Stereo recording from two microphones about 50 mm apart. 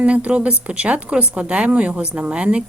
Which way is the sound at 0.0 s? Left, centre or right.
Right.